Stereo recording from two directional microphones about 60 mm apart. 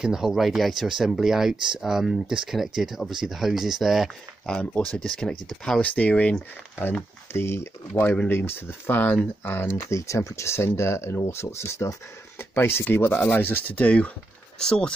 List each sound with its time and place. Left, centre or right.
0.0 s speech: centre
4.9 s speech: centre
5.8 s speech: left
7.3 s speech: left
8.0 s speech: left
8.3 s speech: left
9.8 s speech: left
14.6 s speech: centre